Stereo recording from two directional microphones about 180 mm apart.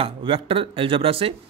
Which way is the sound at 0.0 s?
30° right (ahead or behind).